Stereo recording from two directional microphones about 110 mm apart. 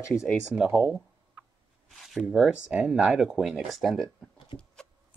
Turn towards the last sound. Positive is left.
turn(degrees=5)  # may be behind; listen again after turning